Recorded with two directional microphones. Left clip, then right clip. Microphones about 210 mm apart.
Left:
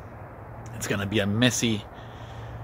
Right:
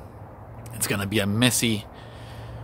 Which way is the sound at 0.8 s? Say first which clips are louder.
Right 1 dB; 10° right (ahead or behind).